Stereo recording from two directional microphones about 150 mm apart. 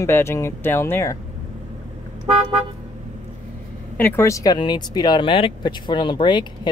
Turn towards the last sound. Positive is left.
turn(degrees=30)  # may be behind; listen again after turning